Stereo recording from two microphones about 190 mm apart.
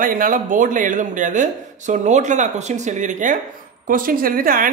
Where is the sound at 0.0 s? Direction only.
45° right (ahead or behind).